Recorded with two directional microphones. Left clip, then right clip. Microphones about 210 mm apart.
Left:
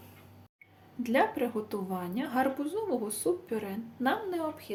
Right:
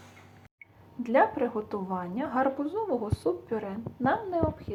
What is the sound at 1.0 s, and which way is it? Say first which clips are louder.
Speech: right 4 dB; 15° left (ahead or behind).